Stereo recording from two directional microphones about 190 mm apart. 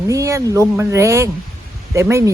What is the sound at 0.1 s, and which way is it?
Speech, 15° right (ahead or behind).